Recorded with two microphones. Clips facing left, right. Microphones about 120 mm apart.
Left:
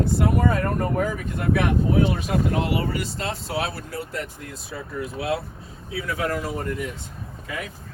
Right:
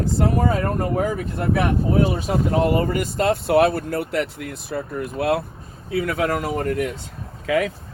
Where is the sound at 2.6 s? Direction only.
45° right (ahead or behind); by 6.9 s 70° right (ahead or behind).